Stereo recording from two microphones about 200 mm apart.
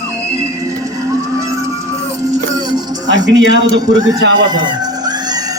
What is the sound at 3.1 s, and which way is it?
Speech, 65° right (ahead or behind).